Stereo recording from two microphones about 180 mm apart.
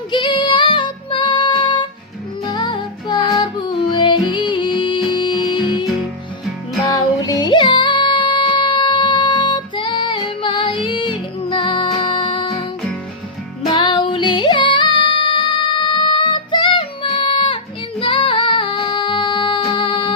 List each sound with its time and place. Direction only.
0.1 s music: 25° left (ahead or behind)
6.8 s music: 20° left (ahead or behind)
13.7 s music: 25° left (ahead or behind)